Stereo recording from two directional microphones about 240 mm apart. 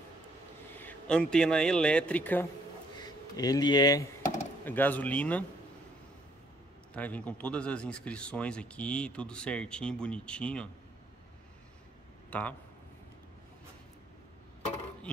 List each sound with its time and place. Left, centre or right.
0.7 s a man's voice: centre
6.9 s speech: centre
12.3 s a man's voice: centre